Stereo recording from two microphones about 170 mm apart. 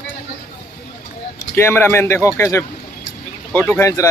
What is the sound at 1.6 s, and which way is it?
Speech, 15° left (ahead or behind).